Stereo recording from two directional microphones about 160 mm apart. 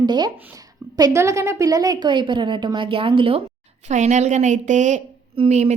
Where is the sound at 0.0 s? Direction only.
25° right (ahead or behind).